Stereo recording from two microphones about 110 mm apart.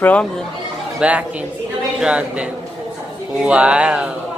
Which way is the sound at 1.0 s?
10° right (ahead or behind).